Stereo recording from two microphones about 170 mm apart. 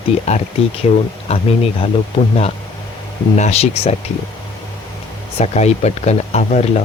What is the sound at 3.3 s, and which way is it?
Speech, 40° left (ahead or behind).